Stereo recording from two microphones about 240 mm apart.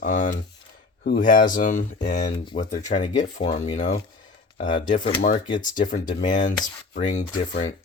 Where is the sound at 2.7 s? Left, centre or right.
Centre.